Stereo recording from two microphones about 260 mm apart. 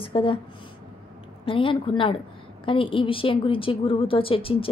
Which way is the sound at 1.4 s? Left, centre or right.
Centre.